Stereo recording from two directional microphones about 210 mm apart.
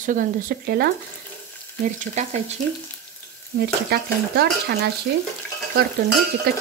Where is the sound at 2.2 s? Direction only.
30° right (ahead or behind).